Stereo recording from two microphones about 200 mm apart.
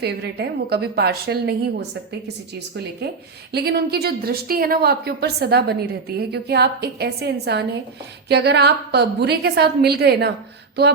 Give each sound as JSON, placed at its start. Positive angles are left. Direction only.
{"t": 0.0, "sound": "a woman's voice", "side_deg": -55}
{"t": 3.5, "sound": "a woman's voice", "side_deg": -50}